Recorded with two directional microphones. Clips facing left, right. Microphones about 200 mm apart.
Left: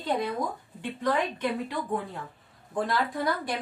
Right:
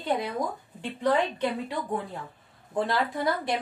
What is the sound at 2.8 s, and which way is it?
Speech, 25° right (ahead or behind).